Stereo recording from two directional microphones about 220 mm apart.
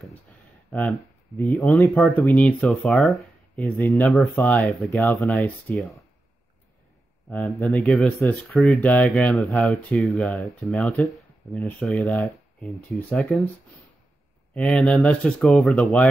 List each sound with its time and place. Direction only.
0.7 s speech: 5° left (ahead or behind)
7.2 s speech: centre (ahead or behind)
14.5 s speech: 5° left (ahead or behind)